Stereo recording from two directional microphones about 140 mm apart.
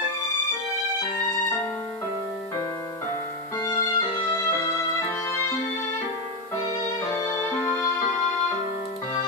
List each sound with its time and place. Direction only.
3.5 s music: 25° left (ahead or behind)
7.1 s music: 20° left (ahead or behind)